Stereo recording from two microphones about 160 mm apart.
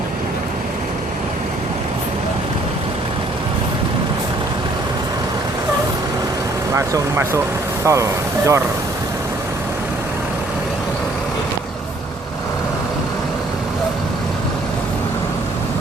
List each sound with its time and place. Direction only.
6.7 s speech: 20° right (ahead or behind)